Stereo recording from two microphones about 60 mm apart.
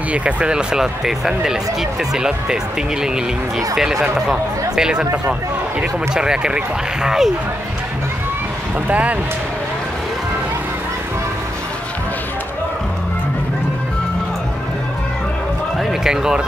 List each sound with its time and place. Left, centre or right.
0.1 s speech: right
8.8 s speech: right
15.8 s speech: centre